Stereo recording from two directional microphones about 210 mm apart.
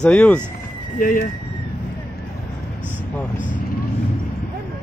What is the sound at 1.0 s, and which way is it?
Speech, 40° left (ahead or behind).